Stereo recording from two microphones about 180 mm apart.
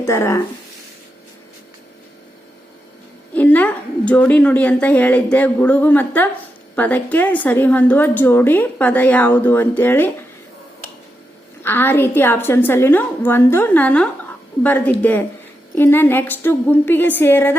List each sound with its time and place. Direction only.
0.0 s a woman's voice: 15° left (ahead or behind)
3.3 s a woman's voice: 10° left (ahead or behind)
11.6 s a woman's voice: 10° left (ahead or behind)